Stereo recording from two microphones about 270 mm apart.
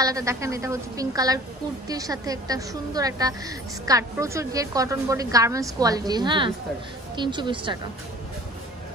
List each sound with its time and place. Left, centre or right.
0.0 s a woman's voice: centre